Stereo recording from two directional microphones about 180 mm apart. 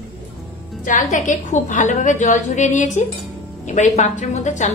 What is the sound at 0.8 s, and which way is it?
A woman's voice, 45° left (ahead or behind).